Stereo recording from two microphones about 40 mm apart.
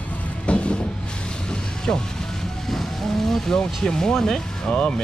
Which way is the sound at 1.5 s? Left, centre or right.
Centre.